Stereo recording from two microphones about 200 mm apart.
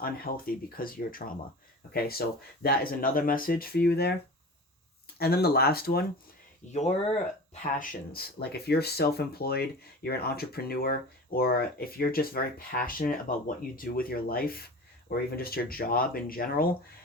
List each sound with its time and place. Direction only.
0.0 s speech: 45° left (ahead or behind)
5.1 s speech: 50° left (ahead or behind)
6.7 s speech: 35° left (ahead or behind)